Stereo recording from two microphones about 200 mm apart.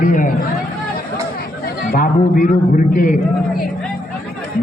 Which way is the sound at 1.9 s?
45° left (ahead or behind).